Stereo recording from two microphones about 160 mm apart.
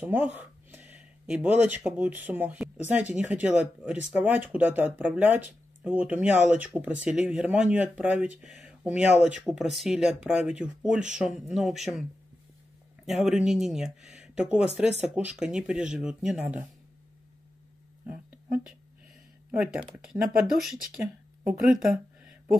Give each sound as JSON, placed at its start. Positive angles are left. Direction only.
{"t": 0.0, "sound": "speech", "side_deg": -10}
{"t": 19.5, "sound": "speech", "side_deg": -5}
{"t": 21.6, "sound": "a sound", "side_deg": -5}